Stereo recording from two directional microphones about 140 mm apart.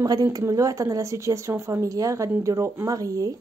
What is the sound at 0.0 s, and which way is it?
A woman's voice, 25° right (ahead or behind).